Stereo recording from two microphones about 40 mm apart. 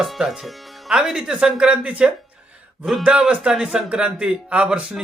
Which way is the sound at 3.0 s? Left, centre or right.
Right.